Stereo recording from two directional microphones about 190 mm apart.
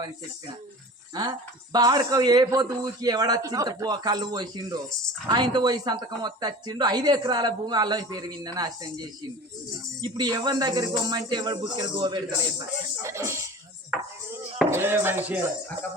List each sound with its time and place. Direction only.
1.1 s speech: 20° right (ahead or behind)
14.7 s speech: 10° right (ahead or behind)